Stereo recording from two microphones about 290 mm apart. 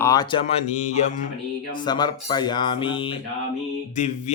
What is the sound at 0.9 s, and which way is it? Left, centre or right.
Music, left.